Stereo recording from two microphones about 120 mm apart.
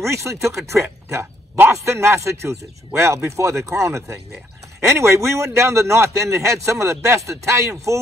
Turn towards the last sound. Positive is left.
turn(degrees=-25)  # may be behind; listen again after turning